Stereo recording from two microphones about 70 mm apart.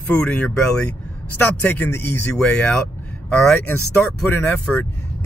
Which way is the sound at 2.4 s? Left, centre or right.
Centre.